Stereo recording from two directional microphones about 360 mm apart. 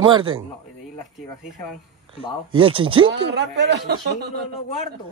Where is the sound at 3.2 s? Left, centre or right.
Right.